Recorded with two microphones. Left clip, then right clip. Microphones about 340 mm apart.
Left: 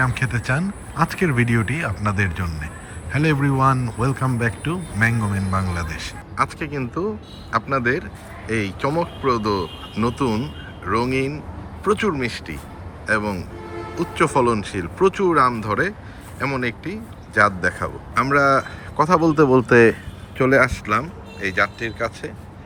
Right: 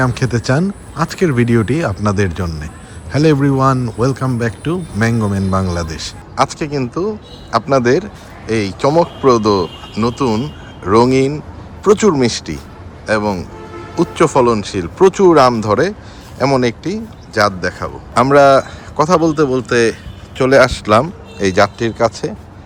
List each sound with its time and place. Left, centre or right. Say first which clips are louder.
0.0 s a man's voice: right 5 dB; centre